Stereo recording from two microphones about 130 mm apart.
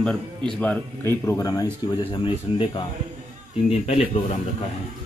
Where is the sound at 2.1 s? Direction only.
40° left (ahead or behind).